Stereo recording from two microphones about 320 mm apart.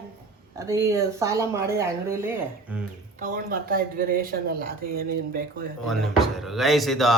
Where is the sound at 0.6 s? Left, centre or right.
Centre.